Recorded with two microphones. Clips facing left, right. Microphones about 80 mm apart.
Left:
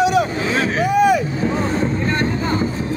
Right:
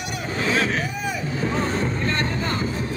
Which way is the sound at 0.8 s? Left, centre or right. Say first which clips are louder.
Left 14 dB; left.